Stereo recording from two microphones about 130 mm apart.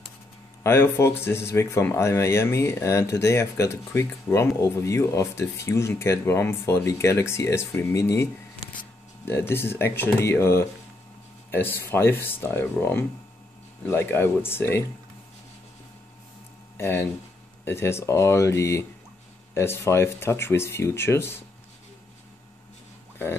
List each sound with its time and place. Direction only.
0.7 s speech: 20° left (ahead or behind)
9.3 s speech: 15° left (ahead or behind)
16.7 s speech: 20° left (ahead or behind)